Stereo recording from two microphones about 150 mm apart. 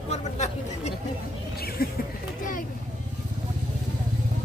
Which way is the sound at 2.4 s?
60° left (ahead or behind).